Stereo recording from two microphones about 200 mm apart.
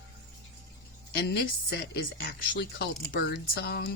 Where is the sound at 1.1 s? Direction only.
55° left (ahead or behind).